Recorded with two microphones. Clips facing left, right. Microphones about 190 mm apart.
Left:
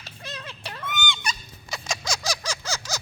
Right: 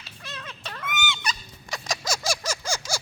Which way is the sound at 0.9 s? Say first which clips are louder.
Even; 5° right (ahead or behind).